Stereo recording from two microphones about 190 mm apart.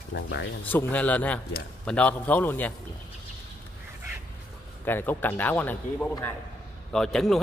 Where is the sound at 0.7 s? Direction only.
10° left (ahead or behind).